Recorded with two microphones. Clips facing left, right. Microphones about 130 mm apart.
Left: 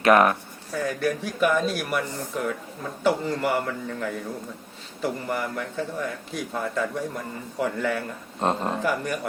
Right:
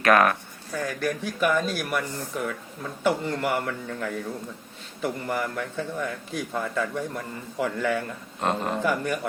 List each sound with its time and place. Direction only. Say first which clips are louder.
0.0 s speech: left 2 dB; 20° left (ahead or behind)
0.7 s a man's voice: left 2 dB; centre (ahead or behind)
8.4 s speech: left 2 dB; 30° left (ahead or behind)
8.8 s a man's voice: right 1 dB; centre (ahead or behind)